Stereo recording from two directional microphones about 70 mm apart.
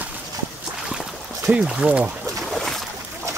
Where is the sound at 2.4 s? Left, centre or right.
Centre.